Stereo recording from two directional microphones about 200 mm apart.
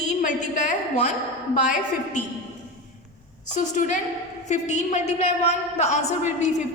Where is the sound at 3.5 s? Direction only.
40° left (ahead or behind).